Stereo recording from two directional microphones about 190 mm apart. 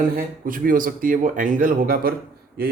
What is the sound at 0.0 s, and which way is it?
Speech, 45° right (ahead or behind).